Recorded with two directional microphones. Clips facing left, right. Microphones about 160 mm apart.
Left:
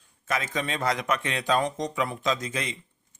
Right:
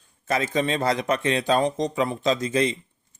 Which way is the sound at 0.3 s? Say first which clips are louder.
Right 6 dB; 35° right (ahead or behind).